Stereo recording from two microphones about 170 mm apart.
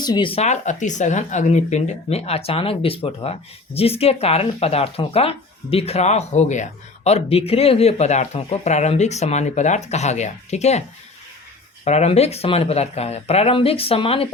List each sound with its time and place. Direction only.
0.0 s speech: 25° left (ahead or behind)
11.9 s speech: 40° left (ahead or behind)